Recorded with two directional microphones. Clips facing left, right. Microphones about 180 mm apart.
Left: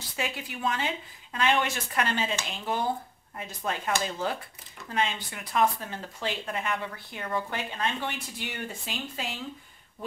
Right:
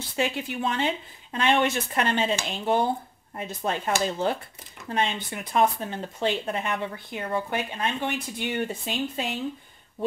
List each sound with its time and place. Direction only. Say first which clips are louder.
0.1 s speech: right 6 dB; 25° right (ahead or behind)